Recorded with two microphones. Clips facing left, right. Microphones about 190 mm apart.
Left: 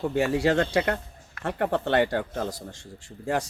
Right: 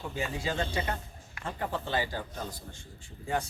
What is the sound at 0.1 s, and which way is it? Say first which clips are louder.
Speech: left 10 dB; 70° left (ahead or behind).